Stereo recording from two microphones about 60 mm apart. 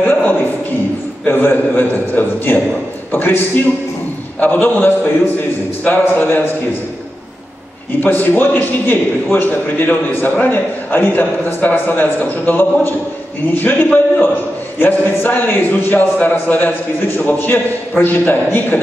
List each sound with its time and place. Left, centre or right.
0.0 s a sound: left
1.2 s a man's voice: left
8.0 s a man's voice: left